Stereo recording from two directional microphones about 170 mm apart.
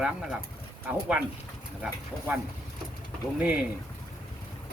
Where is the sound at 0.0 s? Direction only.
Centre (ahead or behind).